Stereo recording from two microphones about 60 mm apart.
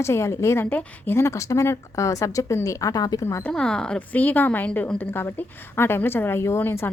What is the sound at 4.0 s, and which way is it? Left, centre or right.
Speech, left.